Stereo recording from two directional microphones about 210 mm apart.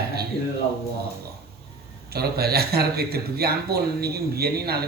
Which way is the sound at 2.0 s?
50° right (ahead or behind).